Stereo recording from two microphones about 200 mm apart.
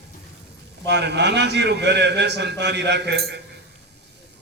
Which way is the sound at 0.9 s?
60° right (ahead or behind).